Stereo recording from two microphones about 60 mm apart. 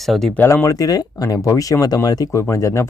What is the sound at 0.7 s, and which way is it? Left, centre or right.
Speech, left.